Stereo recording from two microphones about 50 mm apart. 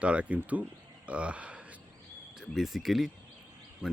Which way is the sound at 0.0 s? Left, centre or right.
Right.